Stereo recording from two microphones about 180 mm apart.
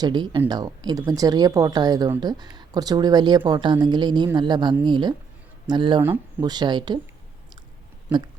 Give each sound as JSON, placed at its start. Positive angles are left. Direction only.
{"t": 0.0, "sound": "speech", "side_deg": -25}
{"t": 6.0, "sound": "speech", "side_deg": -10}
{"t": 6.5, "sound": "speech", "side_deg": -25}
{"t": 8.1, "sound": "speech", "side_deg": -10}